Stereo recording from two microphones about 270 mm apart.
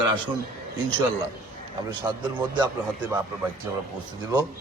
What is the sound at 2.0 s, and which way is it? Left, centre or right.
Speech, centre.